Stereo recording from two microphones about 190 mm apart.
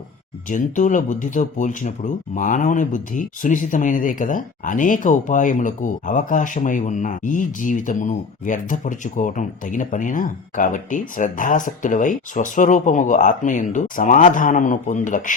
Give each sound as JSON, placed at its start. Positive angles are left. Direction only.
{"t": 0.4, "sound": "speech", "side_deg": 40}